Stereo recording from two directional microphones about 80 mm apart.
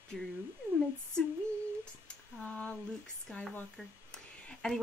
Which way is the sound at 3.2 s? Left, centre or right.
Centre.